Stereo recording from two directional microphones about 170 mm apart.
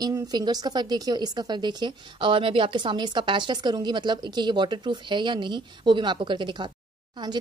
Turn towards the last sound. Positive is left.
turn(degrees=-25)  # may be behind; listen again after turning